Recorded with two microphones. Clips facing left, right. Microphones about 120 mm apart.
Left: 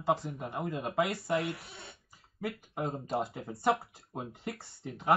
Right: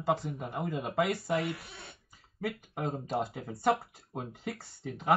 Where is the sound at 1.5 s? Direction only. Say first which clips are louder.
Right 1 dB; 25° left (ahead or behind).